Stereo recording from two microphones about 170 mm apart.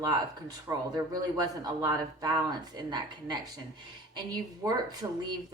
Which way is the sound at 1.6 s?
25° right (ahead or behind).